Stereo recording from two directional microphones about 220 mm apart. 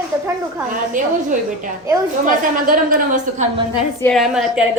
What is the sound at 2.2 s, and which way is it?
A woman's voice, 40° right (ahead or behind).